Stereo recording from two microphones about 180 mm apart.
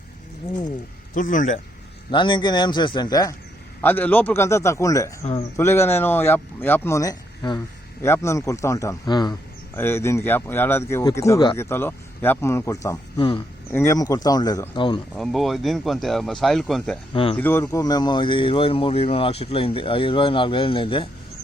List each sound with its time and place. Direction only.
1.1 s a man's voice: 45° left (ahead or behind)
2.0 s speech: 25° left (ahead or behind)
3.8 s speech: 10° left (ahead or behind)
9.7 s speech: 15° left (ahead or behind)
15.2 s speech: centre (ahead or behind); by 21.1 s 30° left (ahead or behind)